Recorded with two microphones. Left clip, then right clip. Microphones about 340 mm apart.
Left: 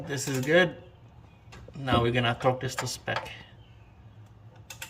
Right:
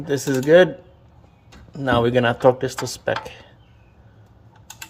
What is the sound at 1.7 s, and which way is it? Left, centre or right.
Speech, centre.